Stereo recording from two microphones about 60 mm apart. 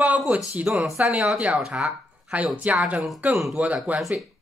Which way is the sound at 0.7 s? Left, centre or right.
Right.